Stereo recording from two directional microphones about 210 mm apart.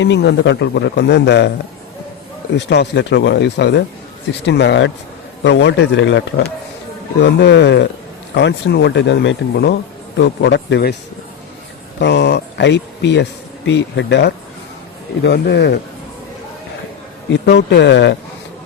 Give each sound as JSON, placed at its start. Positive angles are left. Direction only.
{"t": 0.0, "sound": "speech", "side_deg": 55}
{"t": 2.6, "sound": "speech", "side_deg": 55}
{"t": 11.9, "sound": "speech", "side_deg": 55}
{"t": 17.4, "sound": "speech", "side_deg": 50}